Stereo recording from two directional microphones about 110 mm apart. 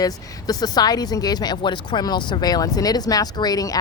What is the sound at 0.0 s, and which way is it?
Speech, 35° left (ahead or behind).